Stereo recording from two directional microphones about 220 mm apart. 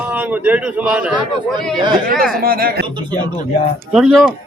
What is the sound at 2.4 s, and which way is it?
Speech, 40° right (ahead or behind).